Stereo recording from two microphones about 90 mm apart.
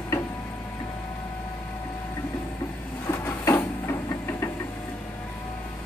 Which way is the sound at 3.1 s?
35° left (ahead or behind).